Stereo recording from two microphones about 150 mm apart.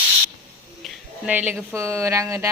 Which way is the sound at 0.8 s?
10° right (ahead or behind).